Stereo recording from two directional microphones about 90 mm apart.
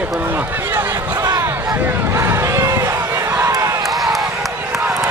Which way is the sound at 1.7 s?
25° right (ahead or behind).